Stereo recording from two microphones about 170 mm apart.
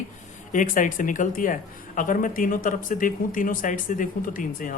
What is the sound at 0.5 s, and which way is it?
Speech, 50° left (ahead or behind).